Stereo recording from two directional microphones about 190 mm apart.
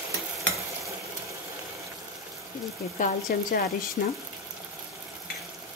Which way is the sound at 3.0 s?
50° left (ahead or behind).